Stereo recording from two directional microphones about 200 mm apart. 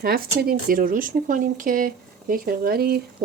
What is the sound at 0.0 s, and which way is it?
Cutlery, 50° right (ahead or behind).